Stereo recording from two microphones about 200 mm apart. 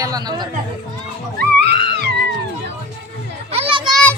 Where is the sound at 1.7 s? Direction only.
55° right (ahead or behind).